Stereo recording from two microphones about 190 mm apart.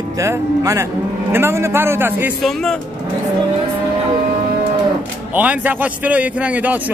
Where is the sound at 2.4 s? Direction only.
5° left (ahead or behind).